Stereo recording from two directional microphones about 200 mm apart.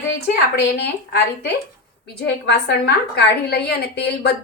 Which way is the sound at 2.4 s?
55° left (ahead or behind).